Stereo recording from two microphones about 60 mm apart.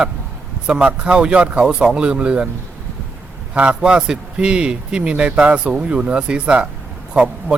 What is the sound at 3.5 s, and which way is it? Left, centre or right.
A man's voice, centre.